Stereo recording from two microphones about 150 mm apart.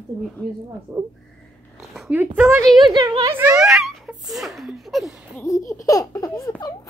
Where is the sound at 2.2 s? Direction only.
10° right (ahead or behind).